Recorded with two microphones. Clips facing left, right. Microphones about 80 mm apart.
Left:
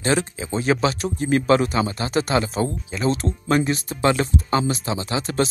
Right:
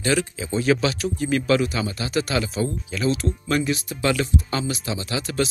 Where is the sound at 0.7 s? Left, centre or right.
Left.